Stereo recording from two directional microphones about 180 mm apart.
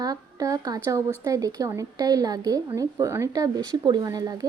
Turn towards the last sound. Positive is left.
turn(degrees=-20)  # may be behind; listen again after turning